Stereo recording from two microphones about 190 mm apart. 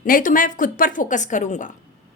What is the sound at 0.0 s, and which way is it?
A woman's voice, 45° left (ahead or behind).